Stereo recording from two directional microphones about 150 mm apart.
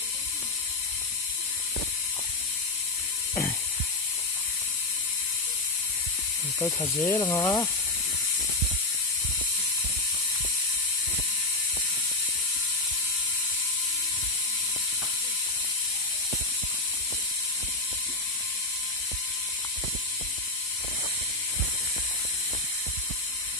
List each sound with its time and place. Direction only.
6.6 s speech: 15° left (ahead or behind)